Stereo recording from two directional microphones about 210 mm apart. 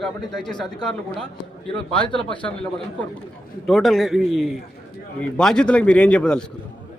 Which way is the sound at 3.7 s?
Centre (ahead or behind).